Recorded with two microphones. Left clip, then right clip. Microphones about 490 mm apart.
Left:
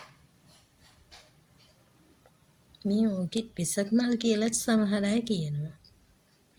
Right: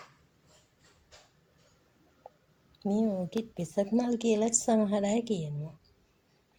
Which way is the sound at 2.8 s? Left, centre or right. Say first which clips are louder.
Left 1 dB; left.